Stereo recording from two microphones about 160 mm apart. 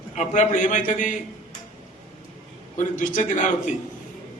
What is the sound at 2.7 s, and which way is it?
A man's voice, 55° left (ahead or behind).